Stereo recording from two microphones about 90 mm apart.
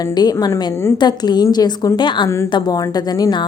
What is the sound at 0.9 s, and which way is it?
Speech, 50° left (ahead or behind).